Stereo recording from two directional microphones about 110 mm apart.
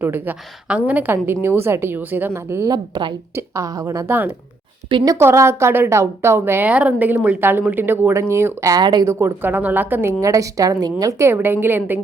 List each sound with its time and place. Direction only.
0.0 s a woman's voice: 15° right (ahead or behind)
2.6 s a woman's voice: 40° right (ahead or behind)
3.3 s a woman's voice: 30° right (ahead or behind)
5.1 s a woman's voice: 25° right (ahead or behind)
8.7 s speech: 40° right (ahead or behind)
9.0 s a woman's voice: 20° right (ahead or behind)